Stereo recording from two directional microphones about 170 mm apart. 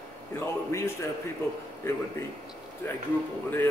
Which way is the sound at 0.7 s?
15° left (ahead or behind).